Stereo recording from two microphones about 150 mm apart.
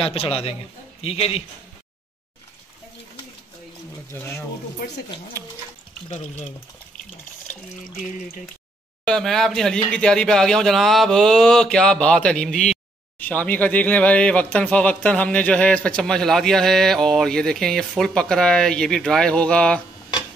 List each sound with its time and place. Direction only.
0.0 s a man's voice: 40° left (ahead or behind)
4.1 s speech: 15° left (ahead or behind)
4.8 s speech: 75° left (ahead or behind)
6.0 s speech: 50° left (ahead or behind)
9.0 s speech: 5° left (ahead or behind)